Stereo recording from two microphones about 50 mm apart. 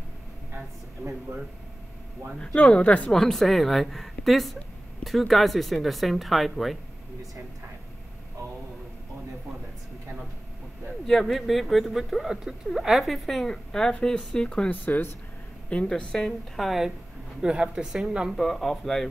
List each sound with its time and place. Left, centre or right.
2.4 s speech: left
3.1 s speech: centre
11.1 s speech: centre
14.7 s speech: left
15.9 s speech: centre
16.5 s speech: centre
17.4 s speech: centre
18.3 s speech: centre